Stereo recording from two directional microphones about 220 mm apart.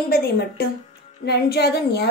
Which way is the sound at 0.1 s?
45° left (ahead or behind).